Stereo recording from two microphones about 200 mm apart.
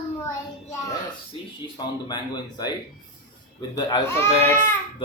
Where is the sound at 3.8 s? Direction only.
15° left (ahead or behind).